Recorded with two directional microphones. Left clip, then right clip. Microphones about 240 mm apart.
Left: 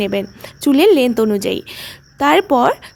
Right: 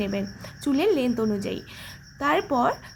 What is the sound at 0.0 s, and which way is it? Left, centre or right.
A woman's voice, left.